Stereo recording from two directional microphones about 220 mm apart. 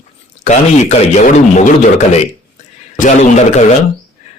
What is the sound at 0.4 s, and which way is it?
Speech, 30° left (ahead or behind).